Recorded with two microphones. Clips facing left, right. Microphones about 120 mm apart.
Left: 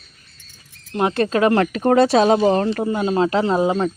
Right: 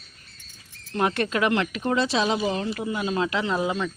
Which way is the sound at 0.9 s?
25° left (ahead or behind).